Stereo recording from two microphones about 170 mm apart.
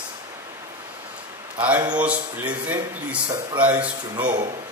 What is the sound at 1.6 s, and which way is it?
Speech, 10° right (ahead or behind).